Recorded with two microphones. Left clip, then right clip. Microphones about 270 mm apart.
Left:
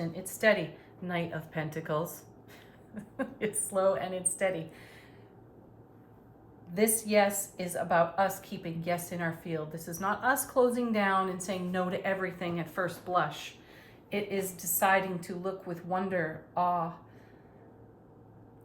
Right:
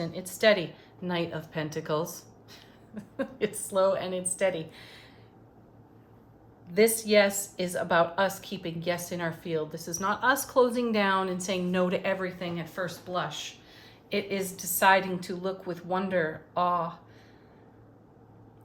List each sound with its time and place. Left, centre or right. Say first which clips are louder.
0.0 s a woman's voice: right 3 dB; centre
6.7 s a woman's voice: right 4 dB; centre
12.2 s speech: right 1 dB; centre
14.1 s a woman's voice: right 3 dB; centre